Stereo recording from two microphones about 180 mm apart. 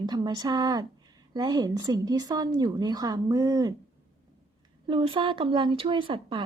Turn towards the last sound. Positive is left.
turn(degrees=-30)  # may be behind; listen again after turning